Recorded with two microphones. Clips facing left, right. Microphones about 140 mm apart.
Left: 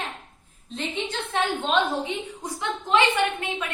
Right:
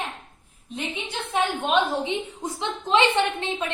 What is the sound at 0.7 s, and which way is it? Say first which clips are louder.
A woman's voice: left 2 dB; 10° right (ahead or behind).